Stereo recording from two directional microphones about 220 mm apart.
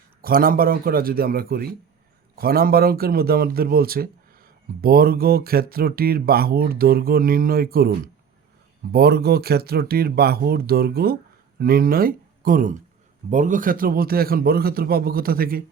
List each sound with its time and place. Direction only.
0.2 s speech: 40° right (ahead or behind)